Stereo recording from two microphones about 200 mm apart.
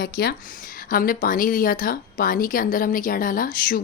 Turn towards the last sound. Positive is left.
turn(degrees=45)  # may be behind; listen again after turning